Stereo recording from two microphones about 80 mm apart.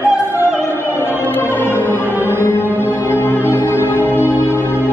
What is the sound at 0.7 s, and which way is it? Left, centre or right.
Opera, left.